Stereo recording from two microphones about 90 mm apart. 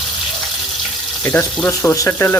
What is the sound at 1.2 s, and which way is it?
Speech, 25° left (ahead or behind).